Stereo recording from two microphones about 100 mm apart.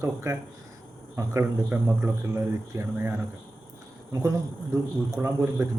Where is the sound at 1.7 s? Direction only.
15° right (ahead or behind).